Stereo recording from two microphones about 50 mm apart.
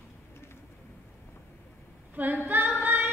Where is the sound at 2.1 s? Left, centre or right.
Right.